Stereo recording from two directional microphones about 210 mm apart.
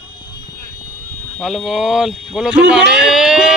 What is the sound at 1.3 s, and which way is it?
A man's voice, centre (ahead or behind).